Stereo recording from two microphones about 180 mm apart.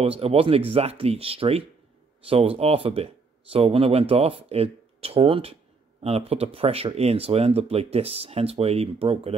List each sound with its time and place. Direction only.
0.0 s speech: 30° right (ahead or behind)